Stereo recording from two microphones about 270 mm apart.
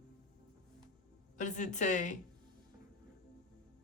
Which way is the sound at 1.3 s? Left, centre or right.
Left.